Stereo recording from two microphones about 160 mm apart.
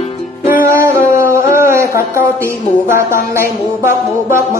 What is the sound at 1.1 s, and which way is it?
A woman's voice, 15° right (ahead or behind).